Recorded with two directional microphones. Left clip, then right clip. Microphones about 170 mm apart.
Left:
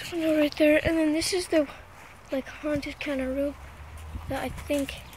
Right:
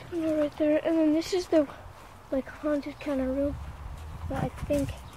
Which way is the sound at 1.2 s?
10° right (ahead or behind).